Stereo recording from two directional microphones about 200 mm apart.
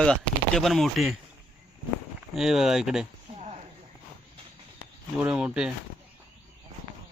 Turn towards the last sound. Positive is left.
turn(degrees=-5)  # may be behind; listen again after turning